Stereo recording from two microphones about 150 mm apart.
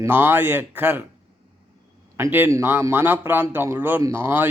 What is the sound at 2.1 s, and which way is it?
Speech, 15° right (ahead or behind).